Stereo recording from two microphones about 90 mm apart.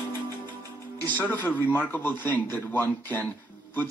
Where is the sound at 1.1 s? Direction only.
20° left (ahead or behind).